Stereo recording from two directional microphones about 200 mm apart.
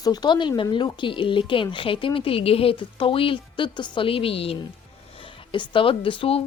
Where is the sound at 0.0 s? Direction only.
20° left (ahead or behind).